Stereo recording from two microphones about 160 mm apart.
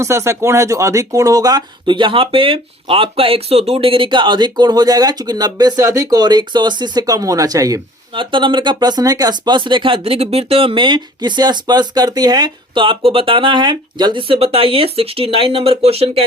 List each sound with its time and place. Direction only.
0.0 s speech: 15° right (ahead or behind); by 16.2 s 40° right (ahead or behind)